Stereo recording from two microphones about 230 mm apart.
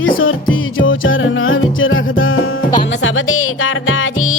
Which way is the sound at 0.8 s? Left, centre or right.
Left.